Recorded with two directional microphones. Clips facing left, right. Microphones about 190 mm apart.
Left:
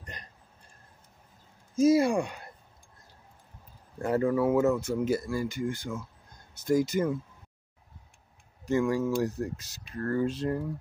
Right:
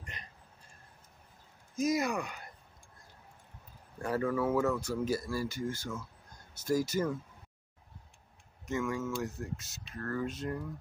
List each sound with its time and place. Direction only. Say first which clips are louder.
0.0 s a sound: left 3 dB; 35° left (ahead or behind)
1.8 s speech: left 9 dB; 30° left (ahead or behind)
4.0 s speech: left 6 dB; 25° left (ahead or behind)
8.6 s speech: left 8 dB; 35° left (ahead or behind)